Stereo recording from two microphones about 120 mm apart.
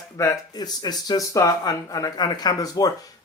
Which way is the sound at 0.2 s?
30° left (ahead or behind).